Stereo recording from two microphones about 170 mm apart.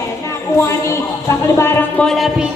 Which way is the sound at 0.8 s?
15° left (ahead or behind).